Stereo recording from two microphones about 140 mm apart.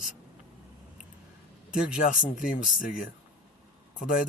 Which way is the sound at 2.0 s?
70° left (ahead or behind).